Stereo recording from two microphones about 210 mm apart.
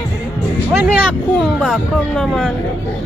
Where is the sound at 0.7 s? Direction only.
10° right (ahead or behind).